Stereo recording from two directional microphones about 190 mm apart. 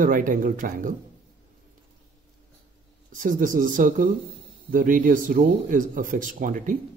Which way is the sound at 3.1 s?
45° right (ahead or behind).